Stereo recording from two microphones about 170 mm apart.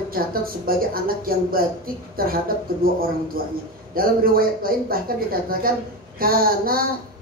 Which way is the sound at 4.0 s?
60° right (ahead or behind).